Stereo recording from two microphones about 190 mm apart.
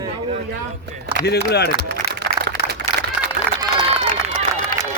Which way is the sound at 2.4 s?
20° right (ahead or behind).